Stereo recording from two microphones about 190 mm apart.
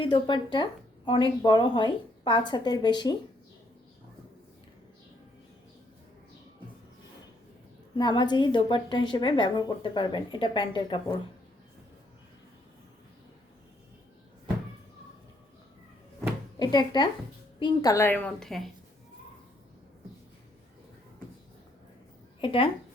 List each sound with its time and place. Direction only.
0.0 s a woman's voice: 25° left (ahead or behind)
7.9 s a woman's voice: 25° left (ahead or behind)
16.6 s a woman's voice: 20° left (ahead or behind); by 18.7 s centre (ahead or behind)
22.4 s speech: 30° left (ahead or behind)